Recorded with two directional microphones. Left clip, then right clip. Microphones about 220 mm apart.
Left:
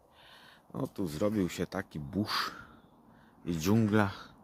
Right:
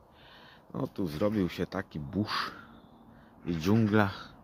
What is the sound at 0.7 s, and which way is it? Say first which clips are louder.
Speech: right 2 dB; 5° left (ahead or behind).